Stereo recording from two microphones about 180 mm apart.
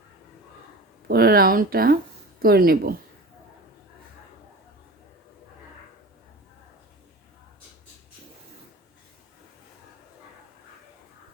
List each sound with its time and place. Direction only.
1.0 s speech: 60° right (ahead or behind)